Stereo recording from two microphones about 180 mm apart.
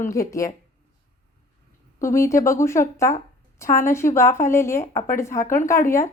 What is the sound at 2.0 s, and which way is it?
Speech, 15° left (ahead or behind).